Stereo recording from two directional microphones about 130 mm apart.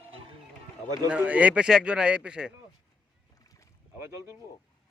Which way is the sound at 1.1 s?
10° right (ahead or behind).